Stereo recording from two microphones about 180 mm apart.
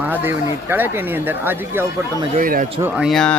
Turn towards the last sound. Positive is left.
turn(degrees=5)  # may be behind; listen again after turning